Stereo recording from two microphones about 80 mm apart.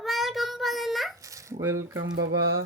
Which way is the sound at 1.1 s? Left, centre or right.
Right.